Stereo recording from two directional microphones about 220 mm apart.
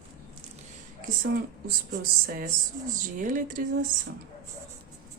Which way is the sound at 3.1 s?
40° right (ahead or behind).